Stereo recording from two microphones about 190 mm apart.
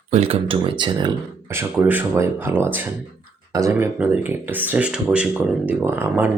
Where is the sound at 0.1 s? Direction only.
30° right (ahead or behind).